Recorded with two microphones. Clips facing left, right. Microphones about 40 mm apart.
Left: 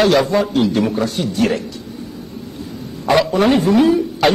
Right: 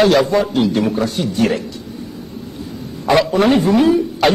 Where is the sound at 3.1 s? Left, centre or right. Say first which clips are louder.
Right 1 dB; centre.